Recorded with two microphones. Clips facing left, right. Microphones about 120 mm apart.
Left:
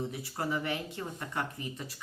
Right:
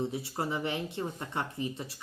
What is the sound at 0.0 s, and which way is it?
Speech, 25° right (ahead or behind).